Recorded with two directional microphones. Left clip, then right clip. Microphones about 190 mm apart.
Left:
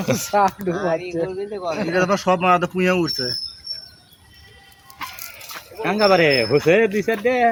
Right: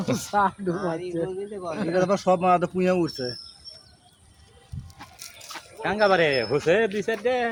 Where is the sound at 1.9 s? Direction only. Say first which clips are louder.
Left 2 dB; 35° right (ahead or behind).